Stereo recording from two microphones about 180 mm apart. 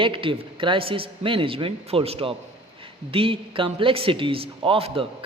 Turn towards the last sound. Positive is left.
turn(degrees=-30)  # may be behind; listen again after turning